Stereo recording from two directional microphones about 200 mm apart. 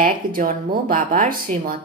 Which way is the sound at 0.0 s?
45° right (ahead or behind).